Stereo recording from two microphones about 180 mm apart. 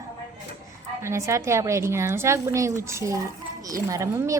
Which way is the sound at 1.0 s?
15° right (ahead or behind).